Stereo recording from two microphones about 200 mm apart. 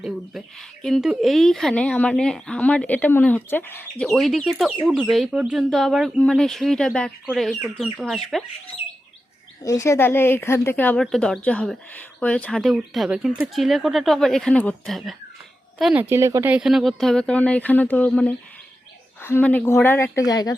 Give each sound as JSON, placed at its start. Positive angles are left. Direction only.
{"t": 0.0, "sound": "speech", "side_deg": 0}
{"t": 9.6, "sound": "speech", "side_deg": 15}